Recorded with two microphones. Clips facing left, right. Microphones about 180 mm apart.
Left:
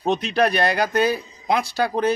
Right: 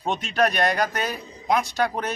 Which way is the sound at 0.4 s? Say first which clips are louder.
Left 1 dB; 30° left (ahead or behind).